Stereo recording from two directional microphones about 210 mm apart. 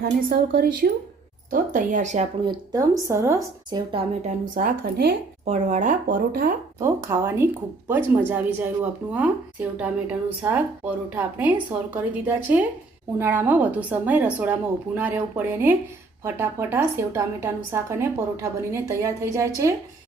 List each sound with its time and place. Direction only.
0.0 s a woman's voice: 45° right (ahead or behind)
2.5 s a woman's voice: 15° right (ahead or behind)
4.4 s a woman's voice: 40° right (ahead or behind)
5.5 s speech: 35° right (ahead or behind)
6.7 s speech: 15° right (ahead or behind)